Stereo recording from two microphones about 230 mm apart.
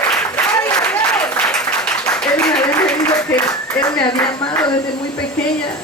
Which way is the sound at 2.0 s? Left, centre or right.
Centre.